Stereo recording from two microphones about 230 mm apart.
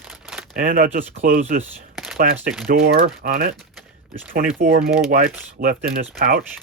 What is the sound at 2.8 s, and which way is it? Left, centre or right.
Speech, right.